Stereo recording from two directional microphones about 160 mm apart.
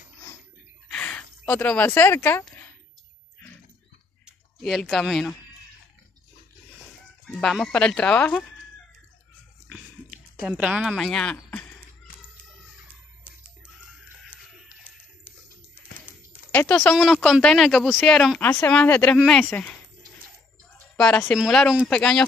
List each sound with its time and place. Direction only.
0.8 s a sound: 5° left (ahead or behind)
4.6 s speech: centre (ahead or behind)
7.2 s speech: centre (ahead or behind)
10.4 s speech: 5° right (ahead or behind)
16.5 s speech: 5° left (ahead or behind)
18.4 s speech: 15° left (ahead or behind)
20.9 s a woman's voice: 10° left (ahead or behind)